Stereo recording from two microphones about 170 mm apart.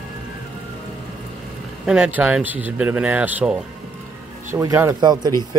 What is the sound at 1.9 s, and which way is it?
Speech, 10° right (ahead or behind).